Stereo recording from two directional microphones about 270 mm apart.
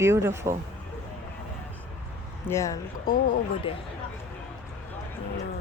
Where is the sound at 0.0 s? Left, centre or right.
Centre.